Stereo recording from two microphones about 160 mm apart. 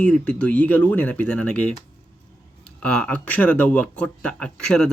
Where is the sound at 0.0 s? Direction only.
10° left (ahead or behind).